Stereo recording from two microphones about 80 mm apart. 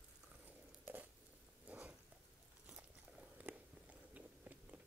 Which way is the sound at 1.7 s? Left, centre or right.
Centre.